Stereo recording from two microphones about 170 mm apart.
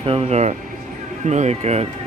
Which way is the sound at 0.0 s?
35° right (ahead or behind).